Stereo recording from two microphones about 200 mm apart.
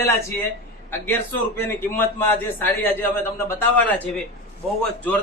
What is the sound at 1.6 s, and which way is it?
A man's voice, 10° left (ahead or behind).